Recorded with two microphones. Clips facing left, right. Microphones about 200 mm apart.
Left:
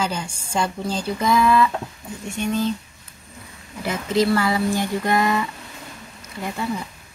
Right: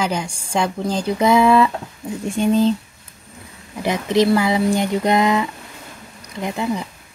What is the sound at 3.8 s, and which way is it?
Speech, 20° right (ahead or behind).